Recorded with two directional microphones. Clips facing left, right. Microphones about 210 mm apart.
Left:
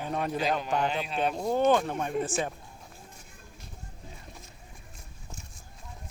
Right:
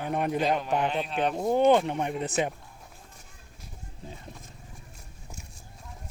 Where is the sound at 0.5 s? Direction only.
5° right (ahead or behind).